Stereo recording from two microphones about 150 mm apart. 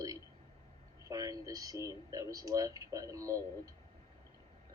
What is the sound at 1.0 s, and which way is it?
Speech, 25° right (ahead or behind).